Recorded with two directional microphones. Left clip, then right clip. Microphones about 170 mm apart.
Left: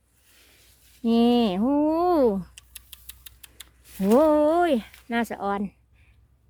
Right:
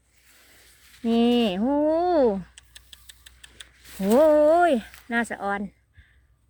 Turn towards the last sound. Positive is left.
turn(degrees=15)  # may be behind; listen again after turning